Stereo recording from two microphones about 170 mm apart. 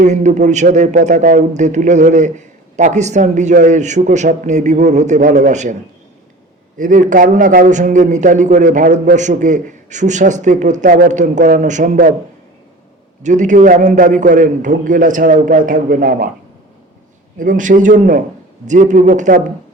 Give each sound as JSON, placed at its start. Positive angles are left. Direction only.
{"t": 0.0, "sound": "a man's voice", "side_deg": -45}
{"t": 6.7, "sound": "a man's voice", "side_deg": -50}
{"t": 13.2, "sound": "a man's voice", "side_deg": -45}
{"t": 17.3, "sound": "a man's voice", "side_deg": -50}